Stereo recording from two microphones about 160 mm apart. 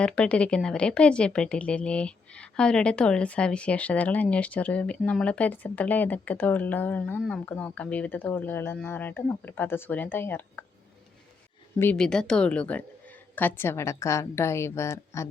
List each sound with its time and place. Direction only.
0.0 s speech: 5° left (ahead or behind)
11.8 s speech: 10° left (ahead or behind)